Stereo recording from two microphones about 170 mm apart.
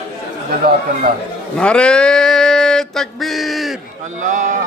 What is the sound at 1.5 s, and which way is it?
Mantra, 5° left (ahead or behind).